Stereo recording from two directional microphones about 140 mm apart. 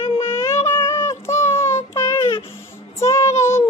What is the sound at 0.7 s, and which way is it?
Child singing, 20° left (ahead or behind).